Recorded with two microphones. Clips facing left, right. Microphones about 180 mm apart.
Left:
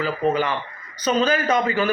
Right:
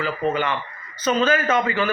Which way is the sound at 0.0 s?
35° left (ahead or behind).